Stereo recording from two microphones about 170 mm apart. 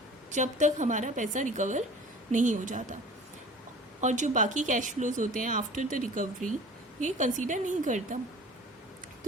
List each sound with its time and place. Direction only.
0.3 s speech: 45° right (ahead or behind)
4.0 s speech: 45° right (ahead or behind)